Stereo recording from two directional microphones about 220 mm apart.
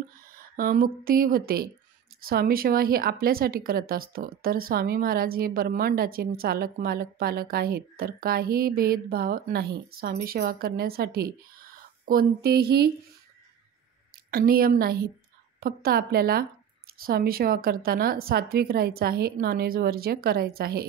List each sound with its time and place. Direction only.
0.3 s a woman's voice: 40° right (ahead or behind)
14.3 s a woman's voice: 40° right (ahead or behind)